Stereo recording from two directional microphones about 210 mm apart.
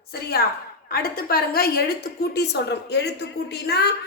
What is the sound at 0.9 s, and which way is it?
A woman's voice, 45° left (ahead or behind).